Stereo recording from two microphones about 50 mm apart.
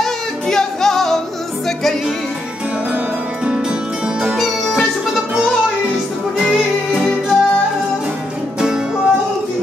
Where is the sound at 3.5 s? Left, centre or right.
Right.